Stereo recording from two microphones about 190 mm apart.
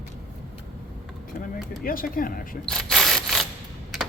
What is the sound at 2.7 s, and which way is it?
Mechanisms, centre (ahead or behind).